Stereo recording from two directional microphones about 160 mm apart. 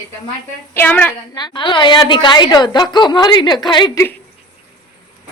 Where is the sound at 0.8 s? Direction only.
10° left (ahead or behind).